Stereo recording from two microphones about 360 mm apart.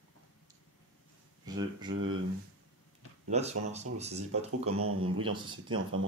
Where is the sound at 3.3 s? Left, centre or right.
Centre.